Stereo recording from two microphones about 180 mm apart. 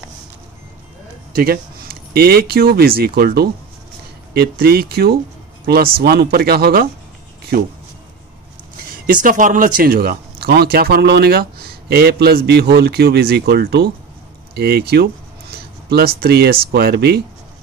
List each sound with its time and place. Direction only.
1.3 s speech: 55° right (ahead or behind)
8.9 s speech: 50° right (ahead or behind)
15.5 s a sound: 60° right (ahead or behind)
16.2 s speech: 60° right (ahead or behind)